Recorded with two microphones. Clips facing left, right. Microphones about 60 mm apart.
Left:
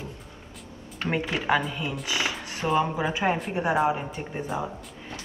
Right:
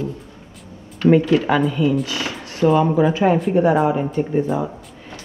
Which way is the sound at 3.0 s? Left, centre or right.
Centre.